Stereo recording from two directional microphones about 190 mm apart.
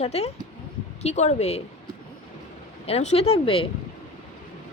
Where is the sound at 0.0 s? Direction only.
35° left (ahead or behind).